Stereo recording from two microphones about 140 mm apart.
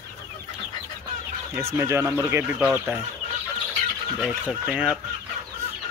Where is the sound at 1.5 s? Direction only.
20° right (ahead or behind).